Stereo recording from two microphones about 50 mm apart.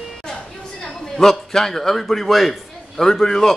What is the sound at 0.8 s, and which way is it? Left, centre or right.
A man's voice, centre.